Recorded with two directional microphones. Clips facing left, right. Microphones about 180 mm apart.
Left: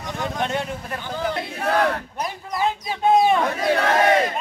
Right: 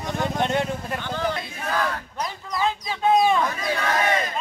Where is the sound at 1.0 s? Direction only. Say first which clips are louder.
Left 2 dB; 10° left (ahead or behind).